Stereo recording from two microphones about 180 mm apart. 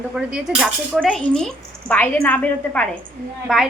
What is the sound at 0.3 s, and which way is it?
A woman's voice, 5° right (ahead or behind).